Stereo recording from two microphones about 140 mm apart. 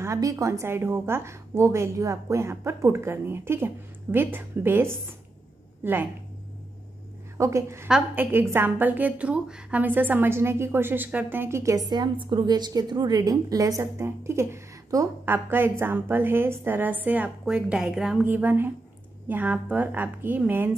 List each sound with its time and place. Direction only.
0.0 s a woman's voice: 20° right (ahead or behind)
7.3 s a woman's voice: 20° right (ahead or behind)
11.9 s a woman's voice: 30° right (ahead or behind); by 18.2 s 5° right (ahead or behind)
18.2 s a woman's voice: 15° right (ahead or behind)